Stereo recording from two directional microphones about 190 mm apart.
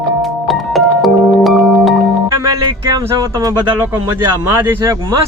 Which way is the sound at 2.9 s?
15° right (ahead or behind).